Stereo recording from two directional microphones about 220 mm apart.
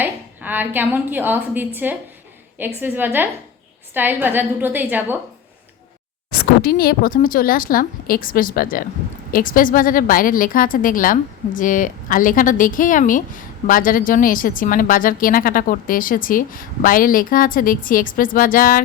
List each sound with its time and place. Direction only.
0.0 s a woman's voice: 10° right (ahead or behind)
6.4 s a woman's voice: 45° left (ahead or behind)